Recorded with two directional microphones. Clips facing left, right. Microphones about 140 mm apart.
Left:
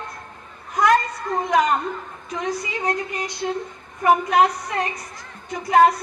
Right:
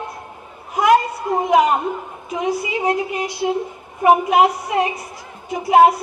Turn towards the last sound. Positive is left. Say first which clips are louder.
# right 3 dB
turn(degrees=-5)  # may be behind; listen again after turning